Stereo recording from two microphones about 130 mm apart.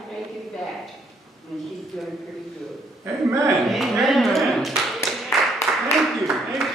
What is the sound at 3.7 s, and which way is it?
A man's voice, centre (ahead or behind).